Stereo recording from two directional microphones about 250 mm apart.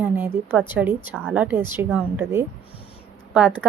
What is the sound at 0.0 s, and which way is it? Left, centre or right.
A woman's voice, centre.